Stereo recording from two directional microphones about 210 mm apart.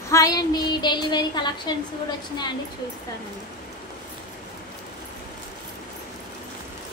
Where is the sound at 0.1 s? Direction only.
15° left (ahead or behind).